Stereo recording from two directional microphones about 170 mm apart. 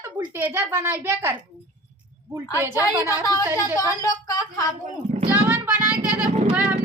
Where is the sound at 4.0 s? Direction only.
20° left (ahead or behind).